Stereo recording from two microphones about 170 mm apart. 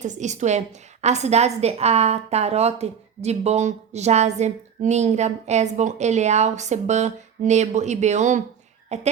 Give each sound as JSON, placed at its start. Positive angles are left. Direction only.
{"t": 0.0, "sound": "a woman's voice", "side_deg": -45}